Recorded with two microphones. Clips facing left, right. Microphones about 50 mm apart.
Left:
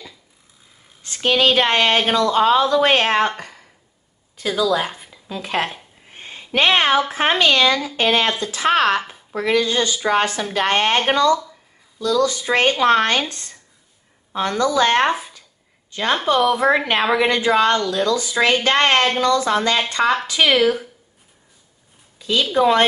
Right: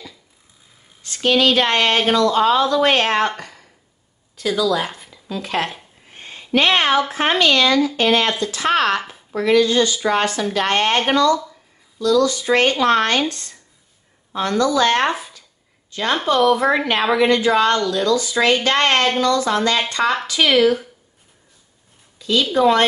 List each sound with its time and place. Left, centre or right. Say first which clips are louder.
1.0 s a woman's voice: right 1 dB; left
5.0 s a sound: right 2 dB; left
7.1 s a woman's voice: even; left
22.2 s a woman's voice: right 1 dB; centre